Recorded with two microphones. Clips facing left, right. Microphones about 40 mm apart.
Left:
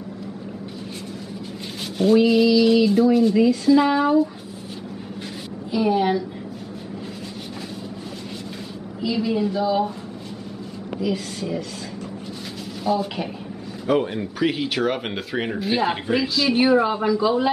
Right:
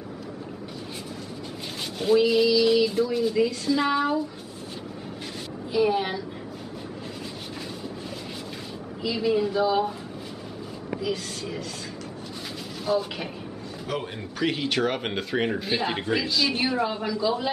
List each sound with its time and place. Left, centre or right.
2.0 s speech: centre
5.7 s speech: centre
9.0 s speech: centre
11.0 s speech: centre
12.8 s a man's voice: centre